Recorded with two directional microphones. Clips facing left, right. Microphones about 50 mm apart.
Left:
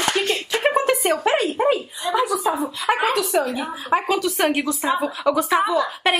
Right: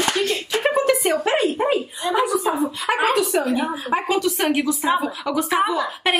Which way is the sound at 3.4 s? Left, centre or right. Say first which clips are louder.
Right 1 dB; centre.